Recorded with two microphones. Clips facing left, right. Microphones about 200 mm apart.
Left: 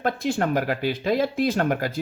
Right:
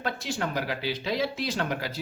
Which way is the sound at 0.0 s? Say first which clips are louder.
Left 7 dB; 55° left (ahead or behind).